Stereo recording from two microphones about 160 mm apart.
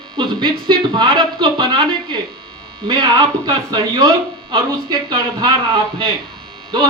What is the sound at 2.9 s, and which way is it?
Speech, 25° right (ahead or behind).